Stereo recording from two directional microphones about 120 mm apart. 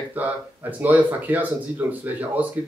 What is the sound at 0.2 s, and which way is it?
Speech, 15° right (ahead or behind).